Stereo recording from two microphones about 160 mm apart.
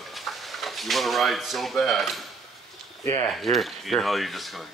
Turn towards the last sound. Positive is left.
turn(degrees=0)  # may be behind; listen again after turning